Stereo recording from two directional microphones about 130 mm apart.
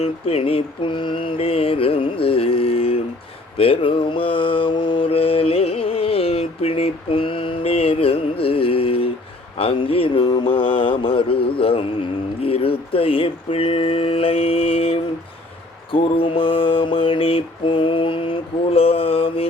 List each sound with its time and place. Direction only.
0.0 s mantra: 50° left (ahead or behind)
12.4 s speech: 50° left (ahead or behind)
15.9 s mantra: 45° left (ahead or behind)